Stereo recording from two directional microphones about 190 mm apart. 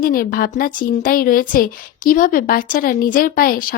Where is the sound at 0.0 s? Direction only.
50° left (ahead or behind).